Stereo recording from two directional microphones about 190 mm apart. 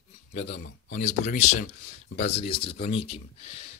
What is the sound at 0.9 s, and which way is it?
Speech, 35° left (ahead or behind).